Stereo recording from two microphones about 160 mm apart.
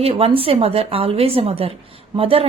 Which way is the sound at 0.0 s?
40° right (ahead or behind).